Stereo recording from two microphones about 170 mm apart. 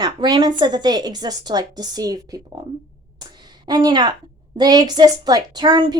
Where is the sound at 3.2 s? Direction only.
25° right (ahead or behind).